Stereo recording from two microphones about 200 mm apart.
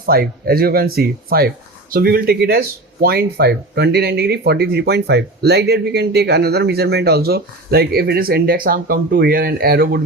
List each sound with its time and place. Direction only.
0.0 s speech: 50° right (ahead or behind)